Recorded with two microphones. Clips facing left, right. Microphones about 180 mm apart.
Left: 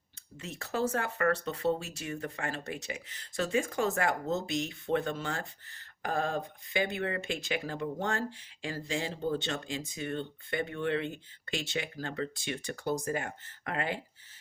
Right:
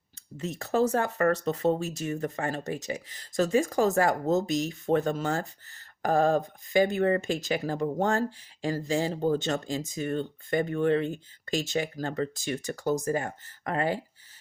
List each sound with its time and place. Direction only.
0.3 s speech: 40° right (ahead or behind)